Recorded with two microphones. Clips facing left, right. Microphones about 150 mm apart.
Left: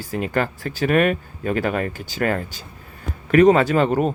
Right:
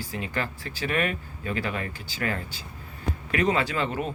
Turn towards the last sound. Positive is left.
turn(degrees=50)  # may be behind; listen again after turning